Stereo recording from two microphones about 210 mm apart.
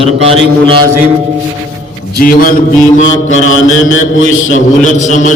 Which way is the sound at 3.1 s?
70° left (ahead or behind).